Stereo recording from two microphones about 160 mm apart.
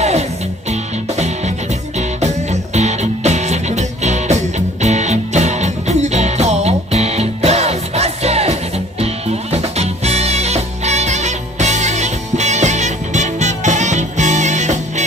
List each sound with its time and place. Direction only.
0.7 s music: 45° right (ahead or behind)